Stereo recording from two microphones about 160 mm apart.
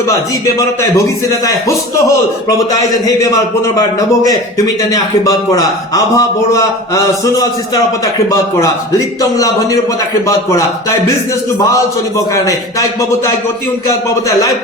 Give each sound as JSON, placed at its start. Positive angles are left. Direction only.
{"t": 0.4, "sound": "a man's voice", "side_deg": 20}
{"t": 2.9, "sound": "a man's voice", "side_deg": 25}